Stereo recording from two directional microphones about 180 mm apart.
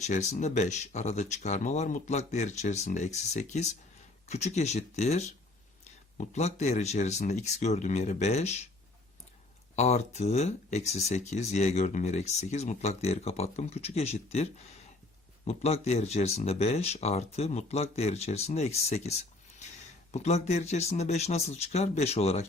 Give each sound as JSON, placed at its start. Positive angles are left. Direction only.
{"t": 0.0, "sound": "speech", "side_deg": 40}
{"t": 9.7, "sound": "speech", "side_deg": 40}
{"t": 15.4, "sound": "speech", "side_deg": 35}